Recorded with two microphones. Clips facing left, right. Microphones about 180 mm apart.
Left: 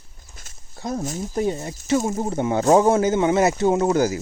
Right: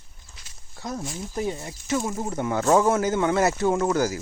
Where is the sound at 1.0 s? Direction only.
45° left (ahead or behind).